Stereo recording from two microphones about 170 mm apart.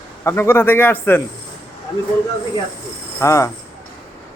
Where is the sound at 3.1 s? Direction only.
15° left (ahead or behind).